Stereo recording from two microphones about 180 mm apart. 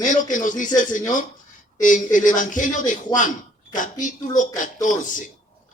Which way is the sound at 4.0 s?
45° left (ahead or behind).